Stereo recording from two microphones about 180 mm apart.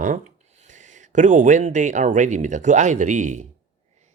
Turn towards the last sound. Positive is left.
turn(degrees=-45)  # may be behind; listen again after turning